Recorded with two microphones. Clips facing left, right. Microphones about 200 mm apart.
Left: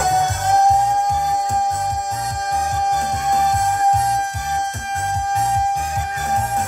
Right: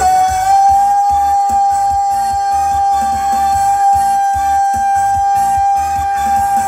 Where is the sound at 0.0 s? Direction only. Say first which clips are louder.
Right 7 dB; 55° right (ahead or behind).